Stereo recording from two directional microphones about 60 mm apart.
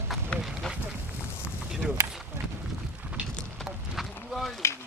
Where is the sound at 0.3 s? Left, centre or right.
Centre.